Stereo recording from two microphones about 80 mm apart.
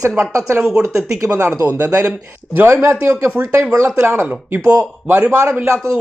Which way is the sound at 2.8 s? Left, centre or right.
Right.